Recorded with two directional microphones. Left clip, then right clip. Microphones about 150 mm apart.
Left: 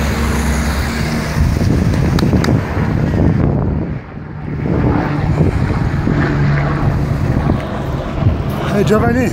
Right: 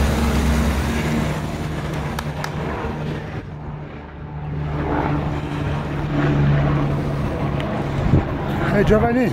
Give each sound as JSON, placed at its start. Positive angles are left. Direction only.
{"t": 8.7, "sound": "speech", "side_deg": 10}